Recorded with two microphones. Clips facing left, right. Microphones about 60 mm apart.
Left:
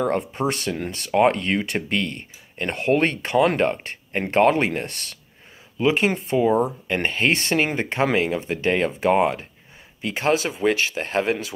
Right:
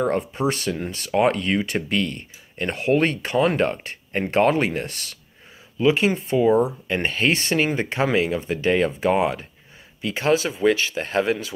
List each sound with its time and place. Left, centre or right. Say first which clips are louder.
0.1 s speech: right 1 dB; left